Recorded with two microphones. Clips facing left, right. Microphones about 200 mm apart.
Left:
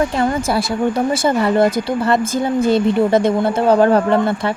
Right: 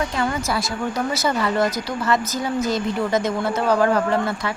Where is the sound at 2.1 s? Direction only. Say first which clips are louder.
Left 6 dB; 55° left (ahead or behind).